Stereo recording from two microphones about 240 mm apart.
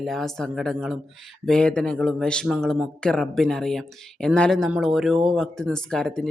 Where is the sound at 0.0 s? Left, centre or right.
Centre.